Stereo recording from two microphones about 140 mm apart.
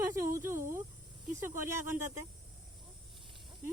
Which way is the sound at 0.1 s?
20° right (ahead or behind).